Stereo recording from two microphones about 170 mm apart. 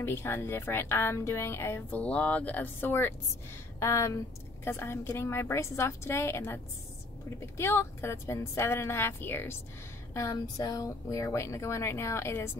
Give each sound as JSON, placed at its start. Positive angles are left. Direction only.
{"t": 0.0, "sound": "speech", "side_deg": 15}